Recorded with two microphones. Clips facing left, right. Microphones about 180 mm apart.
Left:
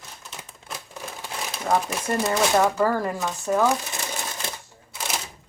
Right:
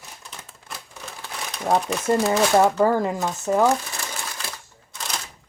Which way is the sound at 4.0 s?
20° left (ahead or behind).